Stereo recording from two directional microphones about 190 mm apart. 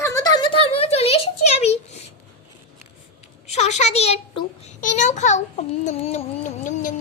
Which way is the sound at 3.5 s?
35° left (ahead or behind).